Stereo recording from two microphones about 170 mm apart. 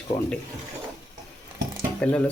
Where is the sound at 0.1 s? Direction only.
25° left (ahead or behind).